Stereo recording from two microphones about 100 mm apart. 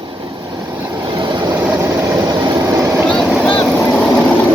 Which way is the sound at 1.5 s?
15° right (ahead or behind).